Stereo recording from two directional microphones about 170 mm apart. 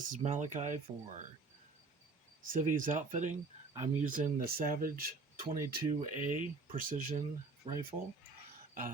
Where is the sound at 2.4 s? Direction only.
50° right (ahead or behind).